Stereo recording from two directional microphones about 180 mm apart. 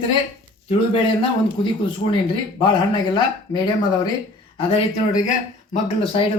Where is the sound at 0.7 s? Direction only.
30° left (ahead or behind).